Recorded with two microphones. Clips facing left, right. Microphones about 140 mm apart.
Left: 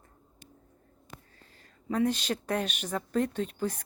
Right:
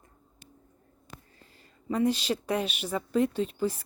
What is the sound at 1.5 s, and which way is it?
A woman's voice, 5° right (ahead or behind).